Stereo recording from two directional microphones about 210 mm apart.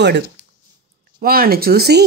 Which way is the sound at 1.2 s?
45° right (ahead or behind).